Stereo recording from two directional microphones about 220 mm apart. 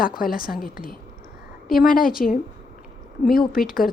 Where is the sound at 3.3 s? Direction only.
40° left (ahead or behind).